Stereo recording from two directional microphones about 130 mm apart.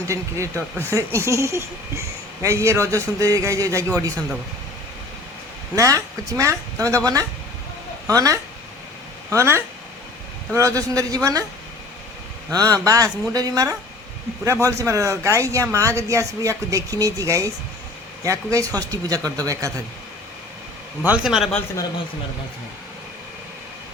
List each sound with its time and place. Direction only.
0.1 s speech: 25° right (ahead or behind)
5.7 s speech: 25° right (ahead or behind)
12.5 s speech: 25° right (ahead or behind)
21.0 s a man's voice: 10° right (ahead or behind)